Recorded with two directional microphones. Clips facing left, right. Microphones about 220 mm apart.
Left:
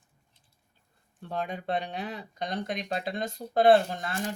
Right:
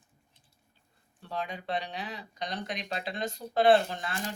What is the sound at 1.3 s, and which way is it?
Speech, 50° left (ahead or behind).